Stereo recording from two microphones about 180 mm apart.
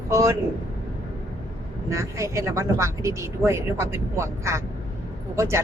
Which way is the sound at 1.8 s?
15° right (ahead or behind).